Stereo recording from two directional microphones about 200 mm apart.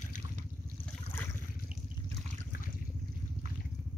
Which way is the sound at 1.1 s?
10° left (ahead or behind).